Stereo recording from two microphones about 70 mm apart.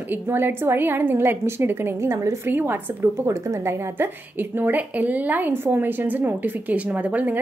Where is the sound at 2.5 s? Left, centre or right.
Right.